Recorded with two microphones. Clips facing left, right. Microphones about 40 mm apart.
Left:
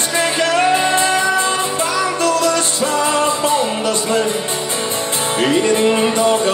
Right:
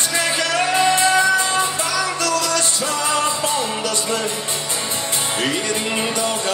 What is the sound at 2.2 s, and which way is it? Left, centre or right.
Music, left.